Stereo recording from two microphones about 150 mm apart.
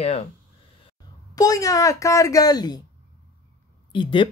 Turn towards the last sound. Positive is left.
turn(degrees=35)  # may be behind; listen again after turning